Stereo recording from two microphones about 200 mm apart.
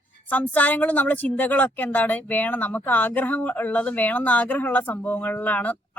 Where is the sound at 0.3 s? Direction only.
10° left (ahead or behind).